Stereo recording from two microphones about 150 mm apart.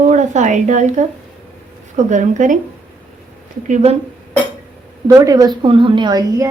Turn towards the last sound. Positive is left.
turn(degrees=-25)  # may be behind; listen again after turning